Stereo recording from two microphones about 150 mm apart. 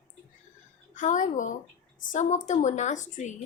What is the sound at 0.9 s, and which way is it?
A woman's voice, 60° left (ahead or behind).